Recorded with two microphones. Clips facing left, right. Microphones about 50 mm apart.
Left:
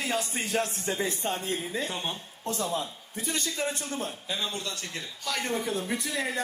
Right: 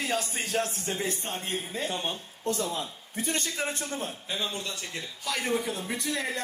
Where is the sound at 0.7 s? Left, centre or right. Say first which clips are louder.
Left 2 dB; left.